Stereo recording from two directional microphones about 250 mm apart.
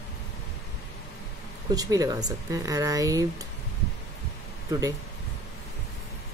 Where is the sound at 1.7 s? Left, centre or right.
Centre.